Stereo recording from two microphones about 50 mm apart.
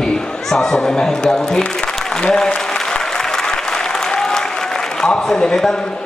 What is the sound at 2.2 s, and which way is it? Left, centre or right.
Applause, centre.